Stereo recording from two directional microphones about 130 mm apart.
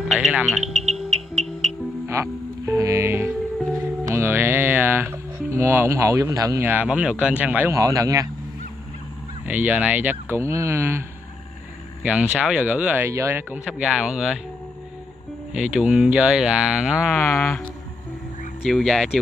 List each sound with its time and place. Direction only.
0.1 s music: 5° right (ahead or behind)
2.0 s speech: 20° right (ahead or behind)
6.6 s speech: 10° right (ahead or behind)
7.7 s a man's voice: 25° right (ahead or behind)
9.5 s speech: 10° right (ahead or behind)
12.0 s speech: 10° right (ahead or behind)
13.7 s speech: 5° right (ahead or behind)
15.5 s speech: 5° right (ahead or behind)
17.1 s speech: 15° left (ahead or behind)
18.6 s speech: centre (ahead or behind)